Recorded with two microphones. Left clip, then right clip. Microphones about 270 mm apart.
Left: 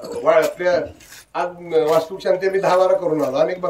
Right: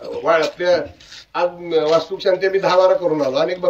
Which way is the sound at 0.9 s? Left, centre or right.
Centre.